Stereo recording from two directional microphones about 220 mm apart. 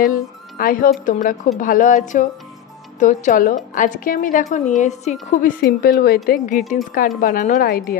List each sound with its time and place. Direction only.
0.1 s a woman's voice: 40° left (ahead or behind)